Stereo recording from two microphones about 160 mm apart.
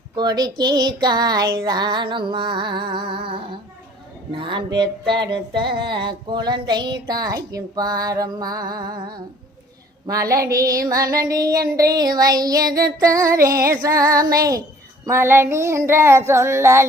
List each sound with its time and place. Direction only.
0.2 s music: 25° right (ahead or behind)
15.0 s child singing: 15° right (ahead or behind)